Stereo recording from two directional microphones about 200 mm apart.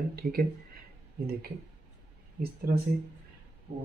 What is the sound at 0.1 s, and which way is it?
Speech, 50° right (ahead or behind).